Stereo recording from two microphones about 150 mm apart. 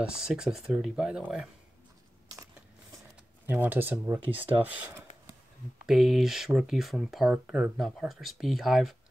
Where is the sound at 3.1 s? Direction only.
10° right (ahead or behind).